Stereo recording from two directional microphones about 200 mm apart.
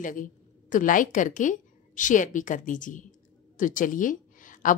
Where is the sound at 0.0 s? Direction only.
40° left (ahead or behind).